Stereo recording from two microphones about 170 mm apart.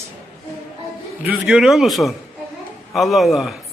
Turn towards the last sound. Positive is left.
turn(degrees=0)  # may be behind; listen again after turning